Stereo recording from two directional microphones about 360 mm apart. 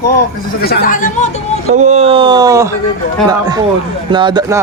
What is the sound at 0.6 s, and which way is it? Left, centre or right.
Speech, left.